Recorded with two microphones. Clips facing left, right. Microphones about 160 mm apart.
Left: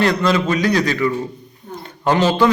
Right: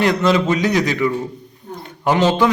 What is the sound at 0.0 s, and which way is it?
A man's voice, 20° right (ahead or behind).